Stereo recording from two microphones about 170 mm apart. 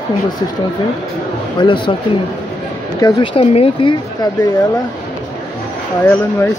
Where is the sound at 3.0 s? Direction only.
30° left (ahead or behind).